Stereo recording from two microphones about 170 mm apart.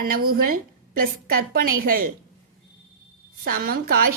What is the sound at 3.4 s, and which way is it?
Speech, 60° right (ahead or behind).